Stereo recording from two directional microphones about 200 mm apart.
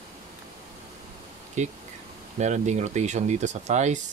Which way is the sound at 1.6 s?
35° right (ahead or behind).